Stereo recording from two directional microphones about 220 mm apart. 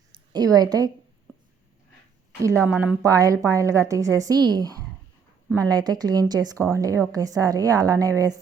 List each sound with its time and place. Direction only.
0.1 s a woman's voice: 20° right (ahead or behind)
2.6 s a woman's voice: 5° right (ahead or behind)